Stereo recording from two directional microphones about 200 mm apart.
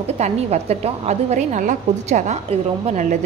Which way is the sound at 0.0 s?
30° right (ahead or behind).